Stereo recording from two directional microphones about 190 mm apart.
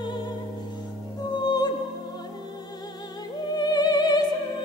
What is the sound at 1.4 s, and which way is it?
Music, 20° left (ahead or behind).